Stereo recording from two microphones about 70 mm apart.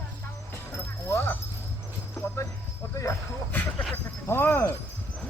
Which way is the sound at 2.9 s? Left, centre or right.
Left.